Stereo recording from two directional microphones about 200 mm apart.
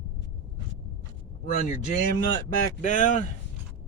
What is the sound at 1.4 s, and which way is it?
Speech, 40° left (ahead or behind).